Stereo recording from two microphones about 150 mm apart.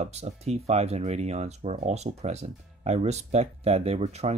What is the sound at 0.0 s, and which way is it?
Speech, 45° right (ahead or behind).